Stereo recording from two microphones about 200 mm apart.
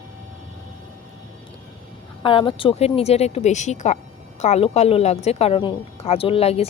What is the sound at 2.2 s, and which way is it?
A woman's voice, 25° left (ahead or behind).